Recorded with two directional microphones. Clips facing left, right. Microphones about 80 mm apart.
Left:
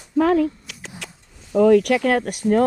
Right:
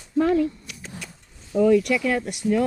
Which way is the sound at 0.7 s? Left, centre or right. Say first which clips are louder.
Left 1 dB; left.